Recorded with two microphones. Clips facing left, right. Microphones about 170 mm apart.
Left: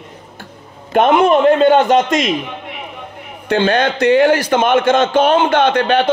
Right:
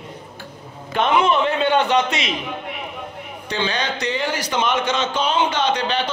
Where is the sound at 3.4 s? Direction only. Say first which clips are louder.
Left 10 dB; 55° left (ahead or behind).